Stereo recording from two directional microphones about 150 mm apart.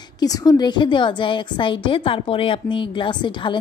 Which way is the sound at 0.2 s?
25° left (ahead or behind).